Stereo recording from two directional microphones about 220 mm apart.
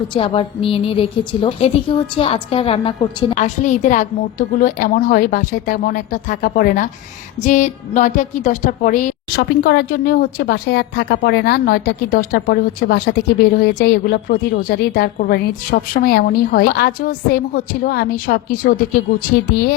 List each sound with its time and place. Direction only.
0.1 s a woman's voice: 25° left (ahead or behind)
3.3 s a woman's voice: 35° left (ahead or behind)
9.4 s a woman's voice: 45° left (ahead or behind)